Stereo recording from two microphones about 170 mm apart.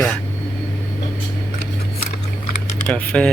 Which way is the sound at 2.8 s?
5° left (ahead or behind).